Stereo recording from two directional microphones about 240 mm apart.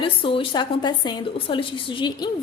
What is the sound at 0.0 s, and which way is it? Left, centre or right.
A woman's voice, left.